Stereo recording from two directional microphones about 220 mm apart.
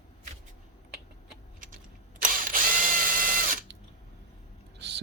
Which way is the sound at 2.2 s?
40° right (ahead or behind).